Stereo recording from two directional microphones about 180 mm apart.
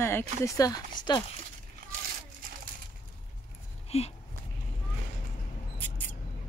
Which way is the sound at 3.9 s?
35° left (ahead or behind).